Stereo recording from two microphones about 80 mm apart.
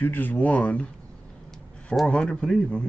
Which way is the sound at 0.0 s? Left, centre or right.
Left.